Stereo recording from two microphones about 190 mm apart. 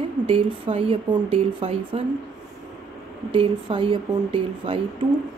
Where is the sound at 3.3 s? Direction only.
25° right (ahead or behind).